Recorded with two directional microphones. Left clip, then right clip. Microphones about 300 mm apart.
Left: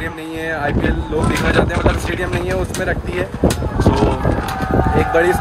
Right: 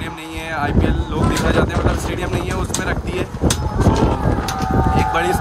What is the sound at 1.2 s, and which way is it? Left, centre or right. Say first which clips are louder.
Speech: left 1 dB; right.